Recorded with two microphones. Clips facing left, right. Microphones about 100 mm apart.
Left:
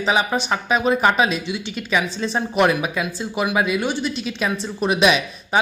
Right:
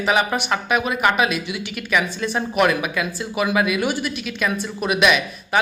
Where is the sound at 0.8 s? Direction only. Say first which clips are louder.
Left 5 dB; 30° left (ahead or behind).